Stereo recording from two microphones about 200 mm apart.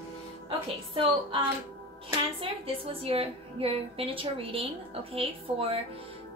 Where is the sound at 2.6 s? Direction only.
30° right (ahead or behind).